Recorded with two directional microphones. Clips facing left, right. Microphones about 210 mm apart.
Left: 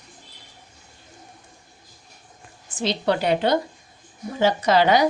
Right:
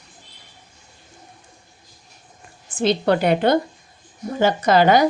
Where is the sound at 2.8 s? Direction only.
50° right (ahead or behind).